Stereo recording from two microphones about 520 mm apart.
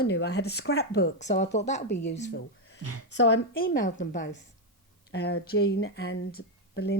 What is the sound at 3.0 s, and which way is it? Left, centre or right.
Speech, centre.